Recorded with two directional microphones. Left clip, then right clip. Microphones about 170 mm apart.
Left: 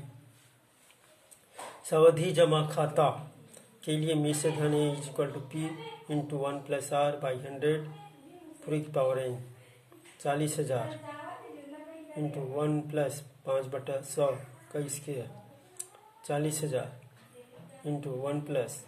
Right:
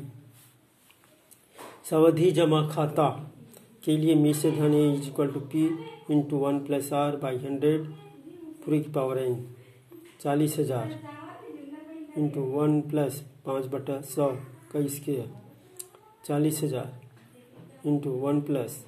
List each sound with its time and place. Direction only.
1.9 s speech: 30° right (ahead or behind)
10.2 s speech: 30° right (ahead or behind)
12.5 s speech: 30° right (ahead or behind)
15.8 s a sound: 30° right (ahead or behind)
17.8 s speech: 30° right (ahead or behind)